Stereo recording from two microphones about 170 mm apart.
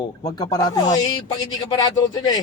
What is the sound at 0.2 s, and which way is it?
Speech, 20° left (ahead or behind).